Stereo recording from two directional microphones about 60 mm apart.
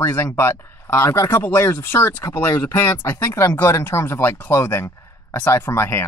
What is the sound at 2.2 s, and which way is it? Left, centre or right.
Speech, left.